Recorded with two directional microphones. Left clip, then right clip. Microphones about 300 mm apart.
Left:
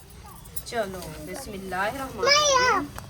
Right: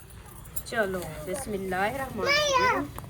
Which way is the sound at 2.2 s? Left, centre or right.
Centre.